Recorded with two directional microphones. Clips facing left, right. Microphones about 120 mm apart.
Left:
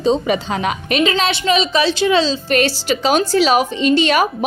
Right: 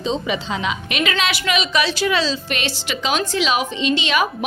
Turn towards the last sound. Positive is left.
turn(degrees=45)  # may be behind; listen again after turning